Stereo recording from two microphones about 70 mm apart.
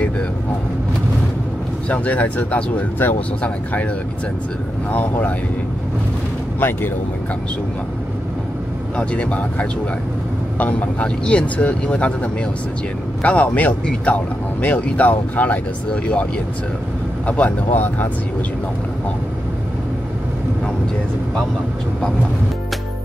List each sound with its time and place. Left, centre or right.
1.9 s speech: left
4.9 s speech: left
8.9 s speech: centre
17.3 s speech: left